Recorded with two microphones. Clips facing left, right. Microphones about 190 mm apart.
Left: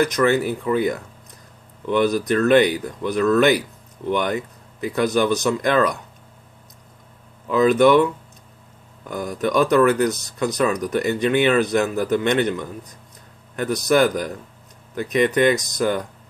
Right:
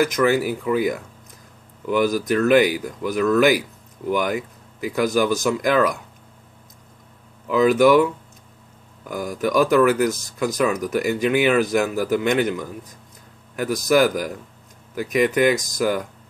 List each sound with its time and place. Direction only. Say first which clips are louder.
0.0 s speech: even; 5° right (ahead or behind)
2.0 s speech: left 1 dB; 5° right (ahead or behind)
7.4 s speech: even; 5° right (ahead or behind)
9.1 s speech: even; 5° right (ahead or behind)
13.6 s speech: even; 5° right (ahead or behind)